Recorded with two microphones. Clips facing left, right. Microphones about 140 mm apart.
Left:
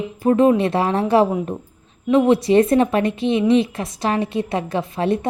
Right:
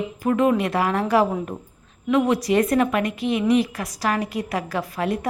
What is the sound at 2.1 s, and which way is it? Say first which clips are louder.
A woman's voice: left 5 dB; 25° left (ahead or behind).